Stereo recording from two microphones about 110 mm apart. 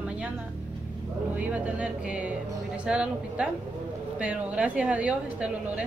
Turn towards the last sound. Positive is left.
turn(degrees=-10)  # may be behind; listen again after turning